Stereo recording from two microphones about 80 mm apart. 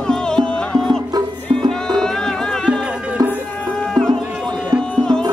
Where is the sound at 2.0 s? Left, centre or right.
Centre.